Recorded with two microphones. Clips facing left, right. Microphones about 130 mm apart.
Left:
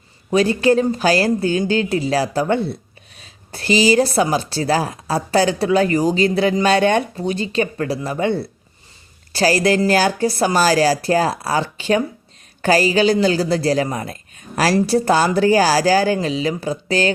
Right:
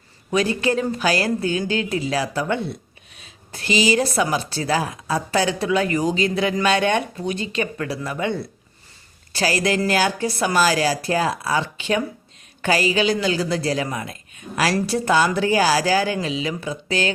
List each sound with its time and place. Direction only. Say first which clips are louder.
0.3 s a woman's voice: left 5 dB; 35° left (ahead or behind)